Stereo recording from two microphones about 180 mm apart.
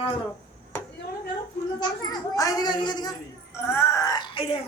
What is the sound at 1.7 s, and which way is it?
A child's voice, 20° left (ahead or behind).